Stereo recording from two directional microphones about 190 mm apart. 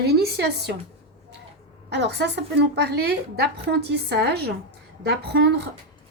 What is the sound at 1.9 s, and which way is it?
A woman's voice, 65° right (ahead or behind).